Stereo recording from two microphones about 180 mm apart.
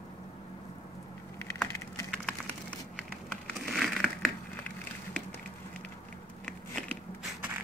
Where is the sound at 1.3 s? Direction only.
15° left (ahead or behind).